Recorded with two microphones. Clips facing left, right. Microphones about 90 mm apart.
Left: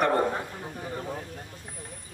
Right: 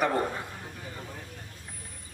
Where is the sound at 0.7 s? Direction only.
45° left (ahead or behind).